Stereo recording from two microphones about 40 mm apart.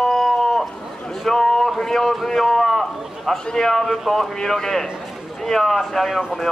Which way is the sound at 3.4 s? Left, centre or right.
Centre.